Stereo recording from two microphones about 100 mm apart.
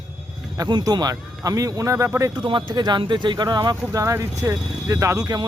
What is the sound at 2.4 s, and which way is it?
Speech, 55° right (ahead or behind).